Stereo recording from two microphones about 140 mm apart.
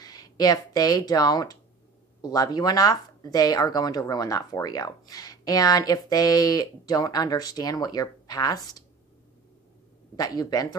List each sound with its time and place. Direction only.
0.0 s speech: 25° left (ahead or behind)
10.1 s speech: 25° left (ahead or behind)